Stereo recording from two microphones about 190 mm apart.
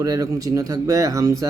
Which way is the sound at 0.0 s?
20° right (ahead or behind).